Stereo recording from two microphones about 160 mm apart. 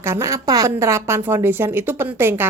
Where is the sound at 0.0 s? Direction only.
15° right (ahead or behind).